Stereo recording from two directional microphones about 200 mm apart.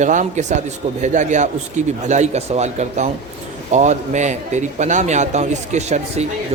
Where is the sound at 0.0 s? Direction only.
40° right (ahead or behind).